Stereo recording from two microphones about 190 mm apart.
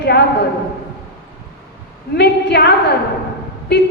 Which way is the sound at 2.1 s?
60° left (ahead or behind).